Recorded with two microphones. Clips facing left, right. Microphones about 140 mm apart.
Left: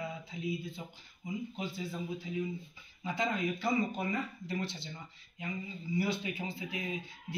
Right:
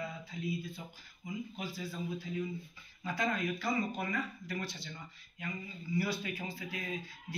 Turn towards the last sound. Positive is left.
turn(degrees=20)  # may be behind; listen again after turning